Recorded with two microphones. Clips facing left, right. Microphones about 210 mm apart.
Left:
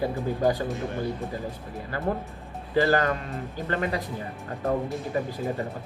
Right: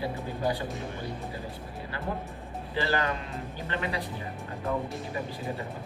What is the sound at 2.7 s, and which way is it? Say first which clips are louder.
Speech: left 7 dB; 45° left (ahead or behind).